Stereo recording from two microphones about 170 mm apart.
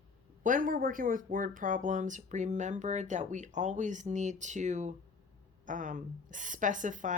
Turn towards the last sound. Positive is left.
turn(degrees=-50)  # may be behind; listen again after turning